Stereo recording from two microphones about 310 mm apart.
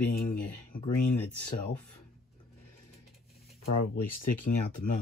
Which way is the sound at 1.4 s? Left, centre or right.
Left.